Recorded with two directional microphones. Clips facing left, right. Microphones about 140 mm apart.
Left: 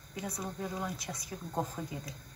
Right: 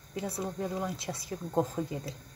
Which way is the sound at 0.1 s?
30° right (ahead or behind).